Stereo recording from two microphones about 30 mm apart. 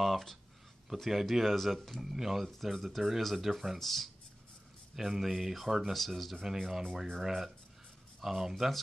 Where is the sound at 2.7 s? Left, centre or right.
Centre.